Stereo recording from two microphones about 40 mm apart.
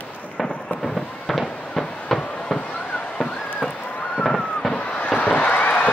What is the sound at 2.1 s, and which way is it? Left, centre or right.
Fireworks, centre.